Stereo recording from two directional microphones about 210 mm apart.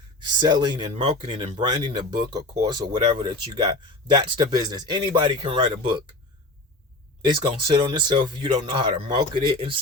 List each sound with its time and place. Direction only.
0.2 s speech: 20° right (ahead or behind)
7.3 s speech: 20° right (ahead or behind)